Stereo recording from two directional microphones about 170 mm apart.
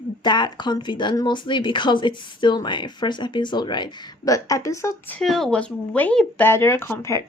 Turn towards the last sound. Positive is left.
turn(degrees=15)  # may be behind; listen again after turning